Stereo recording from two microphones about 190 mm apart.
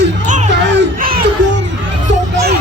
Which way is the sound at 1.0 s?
50° right (ahead or behind).